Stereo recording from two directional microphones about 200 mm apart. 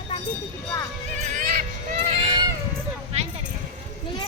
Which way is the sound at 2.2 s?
20° right (ahead or behind).